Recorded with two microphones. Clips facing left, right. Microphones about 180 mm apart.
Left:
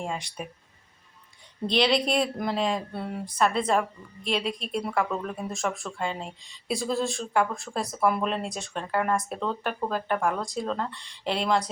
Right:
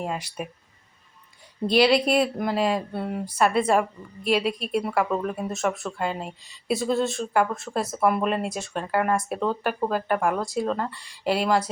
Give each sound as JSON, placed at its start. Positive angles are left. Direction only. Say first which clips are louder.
{"t": 0.0, "sound": "speech", "louder": "right 3 dB", "side_deg": -5}
{"t": 1.6, "sound": "speech", "louder": "right 4 dB", "side_deg": -5}